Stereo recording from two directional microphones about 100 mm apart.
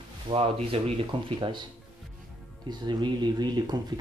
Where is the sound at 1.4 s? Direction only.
50° right (ahead or behind).